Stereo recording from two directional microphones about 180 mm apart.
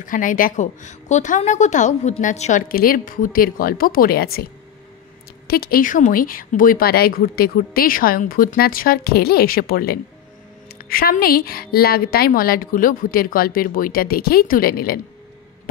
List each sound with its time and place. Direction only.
0.0 s a woman's voice: 50° left (ahead or behind)
2.7 s a woman's voice: 55° left (ahead or behind)
5.5 s speech: 55° left (ahead or behind)